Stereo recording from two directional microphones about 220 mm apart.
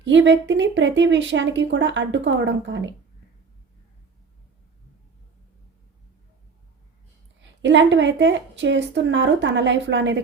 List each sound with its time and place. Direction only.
0.0 s speech: 55° right (ahead or behind)
7.6 s speech: 55° right (ahead or behind)